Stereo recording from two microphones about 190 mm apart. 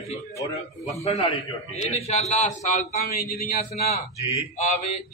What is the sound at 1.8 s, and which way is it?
A man's voice, 35° left (ahead or behind).